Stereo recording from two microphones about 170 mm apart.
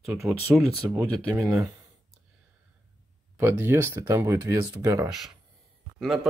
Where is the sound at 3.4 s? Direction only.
15° right (ahead or behind).